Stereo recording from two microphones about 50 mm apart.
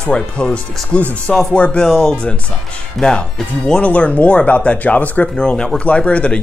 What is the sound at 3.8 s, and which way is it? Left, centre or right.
Speech, left.